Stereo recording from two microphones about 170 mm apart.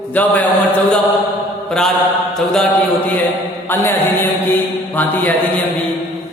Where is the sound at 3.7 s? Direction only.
10° left (ahead or behind).